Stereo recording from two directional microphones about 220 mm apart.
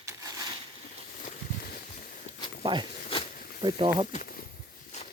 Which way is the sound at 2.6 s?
20° right (ahead or behind).